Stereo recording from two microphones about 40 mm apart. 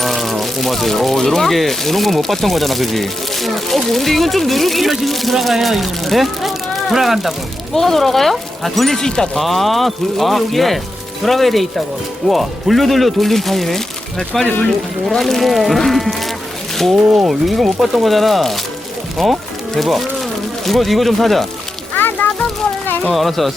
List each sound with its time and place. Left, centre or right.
0.0 s speech: centre
7.7 s speech: centre
9.4 s speech: centre
21.9 s music: left
23.1 s speech: centre